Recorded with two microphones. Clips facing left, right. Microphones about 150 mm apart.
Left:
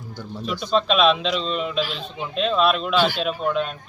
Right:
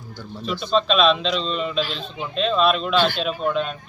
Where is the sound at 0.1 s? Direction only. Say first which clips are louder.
Even; 15° left (ahead or behind).